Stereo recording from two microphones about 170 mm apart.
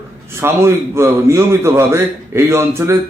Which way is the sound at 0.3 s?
15° right (ahead or behind).